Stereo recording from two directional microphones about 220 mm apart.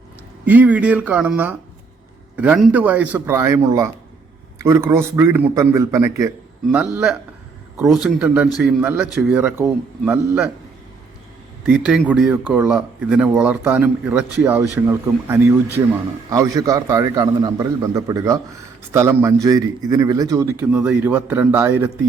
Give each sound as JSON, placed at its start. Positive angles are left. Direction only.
{"t": 0.4, "sound": "a man's voice", "side_deg": -5}
{"t": 11.6, "sound": "a man's voice", "side_deg": 0}